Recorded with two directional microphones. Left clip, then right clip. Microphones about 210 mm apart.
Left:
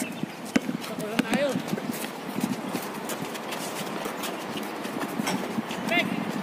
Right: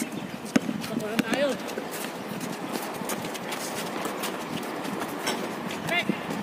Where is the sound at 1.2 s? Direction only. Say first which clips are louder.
Left 1 dB; 10° left (ahead or behind).